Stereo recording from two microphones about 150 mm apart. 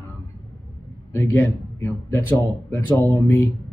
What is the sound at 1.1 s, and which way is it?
Speech, 15° left (ahead or behind).